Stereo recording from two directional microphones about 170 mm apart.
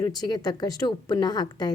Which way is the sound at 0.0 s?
20° left (ahead or behind).